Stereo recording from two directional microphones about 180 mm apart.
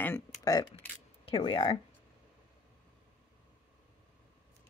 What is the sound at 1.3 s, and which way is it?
Speech, 30° left (ahead or behind).